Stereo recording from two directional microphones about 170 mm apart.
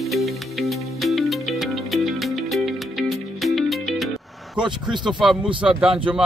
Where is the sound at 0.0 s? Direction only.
Centre (ahead or behind).